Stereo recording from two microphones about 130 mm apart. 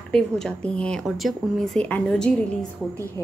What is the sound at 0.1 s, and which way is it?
A woman's voice, 5° left (ahead or behind).